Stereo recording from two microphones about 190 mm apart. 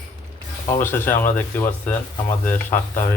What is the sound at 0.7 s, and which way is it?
A man's voice, 10° left (ahead or behind).